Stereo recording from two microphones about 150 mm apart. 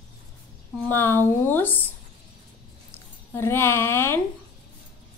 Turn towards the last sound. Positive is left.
turn(degrees=15)  # may be behind; listen again after turning